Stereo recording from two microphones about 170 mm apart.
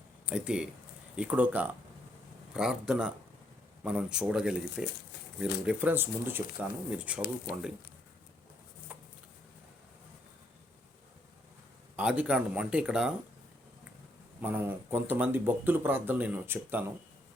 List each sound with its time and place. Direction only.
0.3 s speech: 5° right (ahead or behind)
8.9 s a sound: 10° right (ahead or behind)
11.9 s speech: 5° right (ahead or behind)
14.4 s speech: 10° right (ahead or behind)